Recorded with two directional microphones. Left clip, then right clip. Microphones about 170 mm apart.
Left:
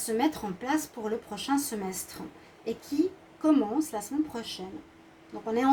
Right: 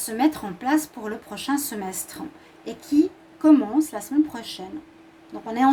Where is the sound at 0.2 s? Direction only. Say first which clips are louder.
Right 10 dB; 45° right (ahead or behind).